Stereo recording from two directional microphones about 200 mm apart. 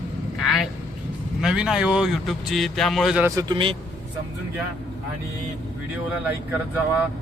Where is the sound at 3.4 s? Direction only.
25° right (ahead or behind).